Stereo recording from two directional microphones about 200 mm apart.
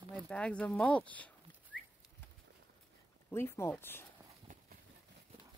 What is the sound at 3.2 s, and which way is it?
Speech, 10° left (ahead or behind).